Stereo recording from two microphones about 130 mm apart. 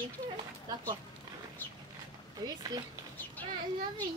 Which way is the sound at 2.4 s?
30° right (ahead or behind).